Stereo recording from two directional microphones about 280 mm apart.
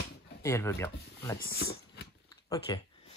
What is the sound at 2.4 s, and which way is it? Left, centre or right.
Speech, centre.